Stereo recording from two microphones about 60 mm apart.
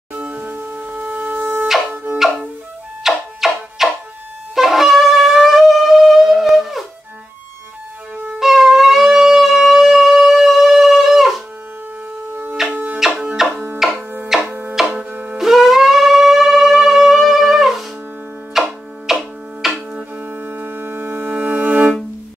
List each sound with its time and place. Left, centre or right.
0.1 s music: right
3.0 s music: centre
4.6 s shofar: centre
8.4 s shofar: centre
12.7 s music: right
13.4 s music: centre
14.5 s music: right
14.9 s music: right
15.3 s shofar: centre
18.5 s tick-tock: centre
19.9 s music: right